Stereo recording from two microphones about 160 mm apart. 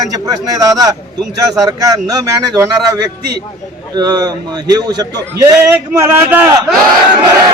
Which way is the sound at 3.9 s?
25° right (ahead or behind).